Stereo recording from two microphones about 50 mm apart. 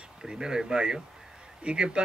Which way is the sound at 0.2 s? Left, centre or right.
Centre.